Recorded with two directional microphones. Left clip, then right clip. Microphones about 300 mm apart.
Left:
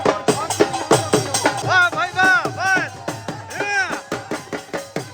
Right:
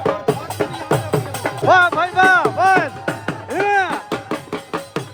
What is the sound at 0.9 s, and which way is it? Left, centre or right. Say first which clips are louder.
Music: left 3 dB; left.